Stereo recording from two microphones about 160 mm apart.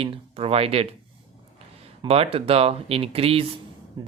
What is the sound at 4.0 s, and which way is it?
Speech, 25° right (ahead or behind).